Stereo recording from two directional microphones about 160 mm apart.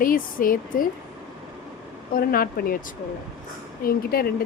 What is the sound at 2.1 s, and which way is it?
Speech, 65° left (ahead or behind).